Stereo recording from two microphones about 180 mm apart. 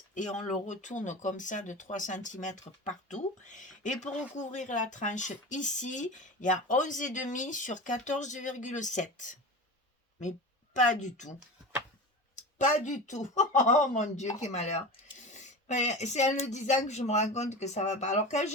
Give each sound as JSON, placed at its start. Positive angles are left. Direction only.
{"t": 0.1, "sound": "speech", "side_deg": 45}
{"t": 10.8, "sound": "speech", "side_deg": 45}
{"t": 12.4, "sound": "speech", "side_deg": 45}